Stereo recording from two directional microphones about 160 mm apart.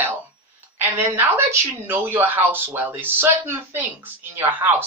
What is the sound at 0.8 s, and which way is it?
A woman's voice, 10° right (ahead or behind).